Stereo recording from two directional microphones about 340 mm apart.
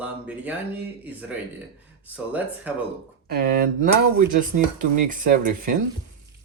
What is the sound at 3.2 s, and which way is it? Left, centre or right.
Speech, right.